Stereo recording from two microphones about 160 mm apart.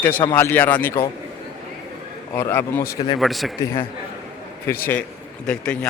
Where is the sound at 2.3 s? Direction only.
15° left (ahead or behind).